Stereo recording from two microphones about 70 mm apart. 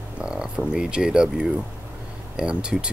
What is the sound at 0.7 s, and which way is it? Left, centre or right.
Speech, centre.